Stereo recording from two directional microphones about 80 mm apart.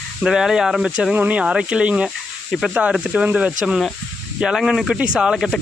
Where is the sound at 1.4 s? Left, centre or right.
Centre.